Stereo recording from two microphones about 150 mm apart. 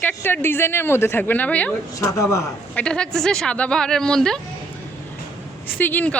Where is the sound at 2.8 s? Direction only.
5° left (ahead or behind).